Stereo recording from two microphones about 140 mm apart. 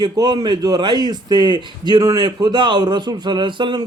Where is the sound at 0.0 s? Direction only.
30° right (ahead or behind).